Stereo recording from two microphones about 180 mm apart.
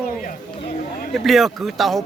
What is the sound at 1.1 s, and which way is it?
Speech, centre (ahead or behind).